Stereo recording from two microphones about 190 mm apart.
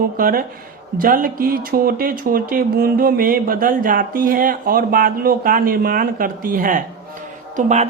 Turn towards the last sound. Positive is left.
turn(degrees=-40)  # may be behind; listen again after turning